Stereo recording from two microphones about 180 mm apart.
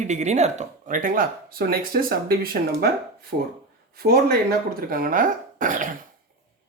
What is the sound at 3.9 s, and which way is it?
Speech, 55° right (ahead or behind).